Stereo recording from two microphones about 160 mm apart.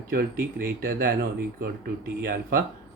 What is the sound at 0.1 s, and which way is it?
Speech, 65° right (ahead or behind).